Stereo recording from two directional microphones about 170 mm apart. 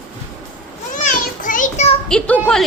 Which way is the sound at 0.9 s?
50° left (ahead or behind).